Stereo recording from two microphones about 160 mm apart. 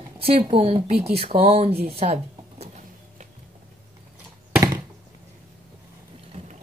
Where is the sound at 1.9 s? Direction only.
40° right (ahead or behind).